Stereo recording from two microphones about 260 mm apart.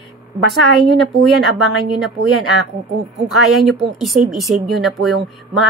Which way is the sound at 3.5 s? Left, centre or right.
Centre.